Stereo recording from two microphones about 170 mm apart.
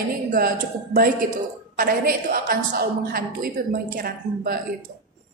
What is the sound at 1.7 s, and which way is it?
A woman's voice, 55° right (ahead or behind).